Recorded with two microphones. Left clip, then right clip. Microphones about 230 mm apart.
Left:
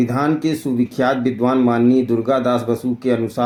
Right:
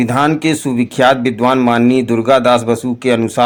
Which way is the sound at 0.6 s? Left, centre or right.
Centre.